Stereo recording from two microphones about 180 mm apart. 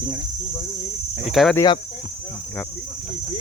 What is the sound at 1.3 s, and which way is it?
Speech, centre (ahead or behind).